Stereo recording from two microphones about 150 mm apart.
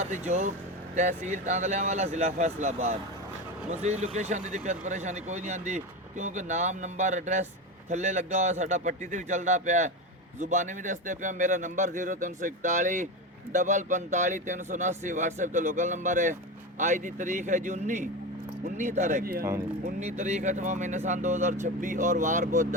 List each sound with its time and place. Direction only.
0.0 s a man's voice: 50° right (ahead or behind)
19.2 s speech: 85° right
19.8 s speech: 50° right (ahead or behind)